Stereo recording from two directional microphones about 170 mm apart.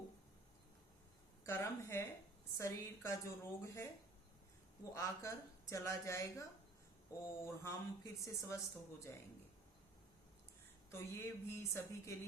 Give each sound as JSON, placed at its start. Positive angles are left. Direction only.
{"t": 1.5, "sound": "speech", "side_deg": 15}
{"t": 4.9, "sound": "speech", "side_deg": 20}
{"t": 10.9, "sound": "speech", "side_deg": 15}